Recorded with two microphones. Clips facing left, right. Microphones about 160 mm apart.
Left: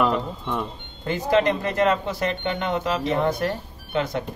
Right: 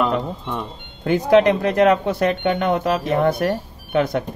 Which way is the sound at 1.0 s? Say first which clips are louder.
Right 6 dB; 65° right (ahead or behind).